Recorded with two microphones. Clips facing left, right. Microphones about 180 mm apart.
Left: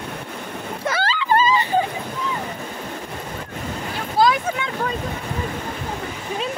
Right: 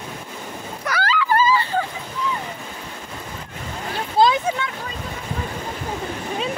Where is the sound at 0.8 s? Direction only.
25° left (ahead or behind).